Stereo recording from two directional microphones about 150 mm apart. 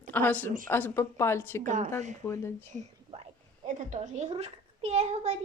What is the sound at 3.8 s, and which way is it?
A woman's voice, 50° right (ahead or behind).